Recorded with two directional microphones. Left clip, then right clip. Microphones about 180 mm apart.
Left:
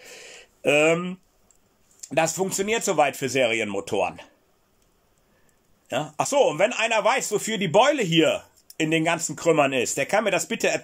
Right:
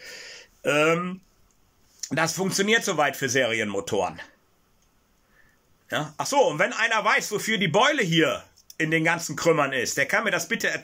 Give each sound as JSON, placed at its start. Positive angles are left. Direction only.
{"t": 0.0, "sound": "a sound", "side_deg": 20}
{"t": 2.0, "sound": "a man's voice", "side_deg": 15}
{"t": 5.9, "sound": "a man's voice", "side_deg": 15}